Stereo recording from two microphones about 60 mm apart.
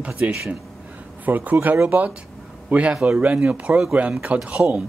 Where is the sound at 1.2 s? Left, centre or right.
Right.